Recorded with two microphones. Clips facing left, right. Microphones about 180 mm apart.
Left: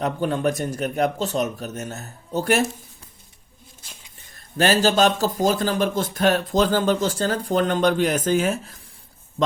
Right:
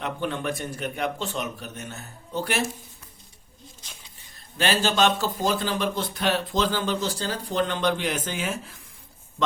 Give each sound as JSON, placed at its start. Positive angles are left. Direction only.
{"t": 0.0, "sound": "speech", "side_deg": 40}
{"t": 4.5, "sound": "speech", "side_deg": 45}